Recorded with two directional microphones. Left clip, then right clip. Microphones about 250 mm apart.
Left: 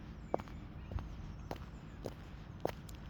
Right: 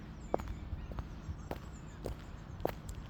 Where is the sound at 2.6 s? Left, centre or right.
Centre.